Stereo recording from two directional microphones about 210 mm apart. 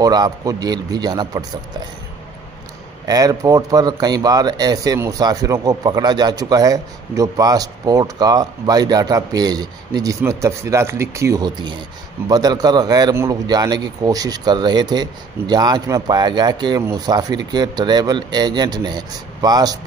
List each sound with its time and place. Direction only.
0.0 s speech: 20° right (ahead or behind)
3.1 s speech: 20° right (ahead or behind)